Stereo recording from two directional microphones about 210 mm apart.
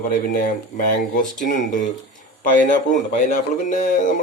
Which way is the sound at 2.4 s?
40° left (ahead or behind).